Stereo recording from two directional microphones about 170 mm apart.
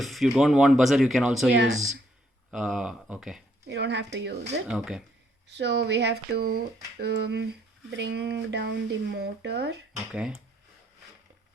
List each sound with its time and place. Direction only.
0.0 s speech: centre (ahead or behind)
2.5 s speech: 5° right (ahead or behind)
3.7 s speech: 90° right
4.7 s speech: 5° right (ahead or behind)
5.5 s speech: 85° right
10.1 s speech: 5° right (ahead or behind)